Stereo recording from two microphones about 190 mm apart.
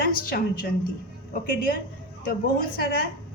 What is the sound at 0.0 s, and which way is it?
Speech, 50° left (ahead or behind).